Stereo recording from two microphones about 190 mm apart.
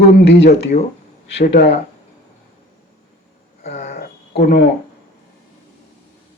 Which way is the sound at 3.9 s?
55° left (ahead or behind).